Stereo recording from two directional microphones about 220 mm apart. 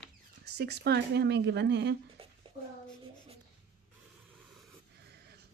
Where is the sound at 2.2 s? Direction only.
25° right (ahead or behind).